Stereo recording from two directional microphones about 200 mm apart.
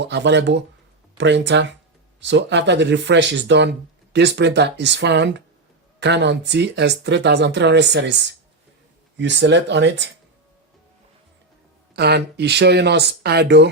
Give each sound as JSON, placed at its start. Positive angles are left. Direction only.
{"t": 0.0, "sound": "speech", "side_deg": -60}
{"t": 11.9, "sound": "speech", "side_deg": -55}